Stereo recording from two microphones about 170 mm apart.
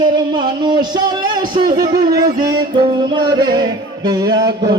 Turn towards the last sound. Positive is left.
turn(degrees=-25)  # may be behind; listen again after turning